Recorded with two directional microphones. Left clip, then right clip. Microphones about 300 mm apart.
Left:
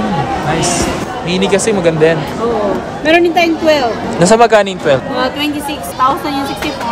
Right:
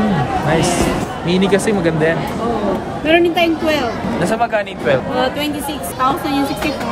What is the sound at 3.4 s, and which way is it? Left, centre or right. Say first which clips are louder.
A man's voice: left 5 dB; centre.